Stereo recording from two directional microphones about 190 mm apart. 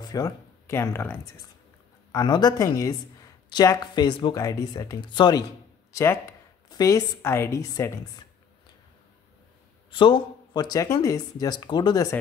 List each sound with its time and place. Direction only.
0.0 s speech: 20° left (ahead or behind)
5.9 s a sound: 15° left (ahead or behind)
6.7 s a woman's voice: 20° left (ahead or behind)
9.8 s speech: 25° left (ahead or behind)